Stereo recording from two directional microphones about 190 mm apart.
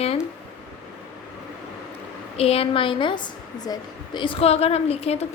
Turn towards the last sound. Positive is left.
turn(degrees=30)  # may be behind; listen again after turning